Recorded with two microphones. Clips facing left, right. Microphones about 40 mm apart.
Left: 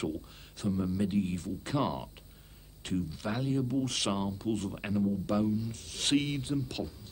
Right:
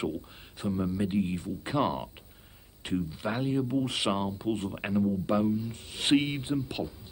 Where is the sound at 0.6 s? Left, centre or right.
Centre.